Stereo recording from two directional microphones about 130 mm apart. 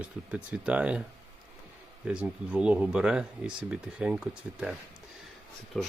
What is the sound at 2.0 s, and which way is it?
Speech, 10° right (ahead or behind).